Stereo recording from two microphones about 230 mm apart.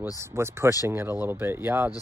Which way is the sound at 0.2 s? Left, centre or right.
Centre.